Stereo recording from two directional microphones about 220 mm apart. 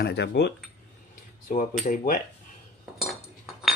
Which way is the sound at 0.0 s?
50° left (ahead or behind).